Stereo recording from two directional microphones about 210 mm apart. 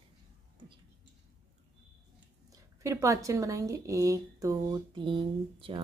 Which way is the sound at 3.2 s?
15° right (ahead or behind).